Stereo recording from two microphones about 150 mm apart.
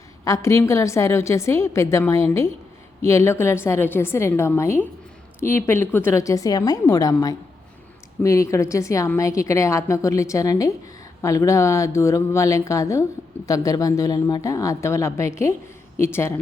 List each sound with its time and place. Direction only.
0.3 s a woman's voice: 20° left (ahead or behind)